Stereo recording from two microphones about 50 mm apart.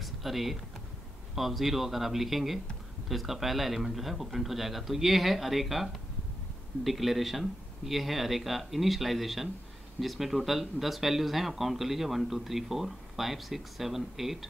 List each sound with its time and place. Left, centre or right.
0.0 s typing: centre
1.3 s speech: centre